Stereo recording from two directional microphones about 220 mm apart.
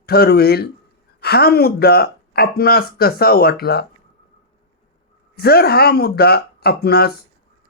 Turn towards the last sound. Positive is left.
turn(degrees=45)  # may be behind; listen again after turning